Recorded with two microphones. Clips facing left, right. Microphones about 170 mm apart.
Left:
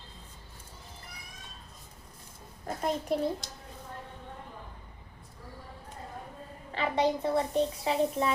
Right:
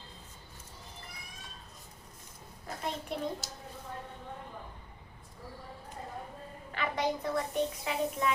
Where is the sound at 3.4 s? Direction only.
5° right (ahead or behind).